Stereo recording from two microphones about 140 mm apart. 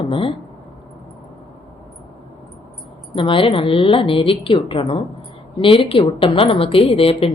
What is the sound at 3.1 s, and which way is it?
A woman's voice, 40° left (ahead or behind).